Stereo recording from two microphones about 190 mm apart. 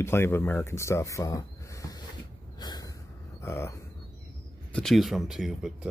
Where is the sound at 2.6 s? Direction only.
20° left (ahead or behind).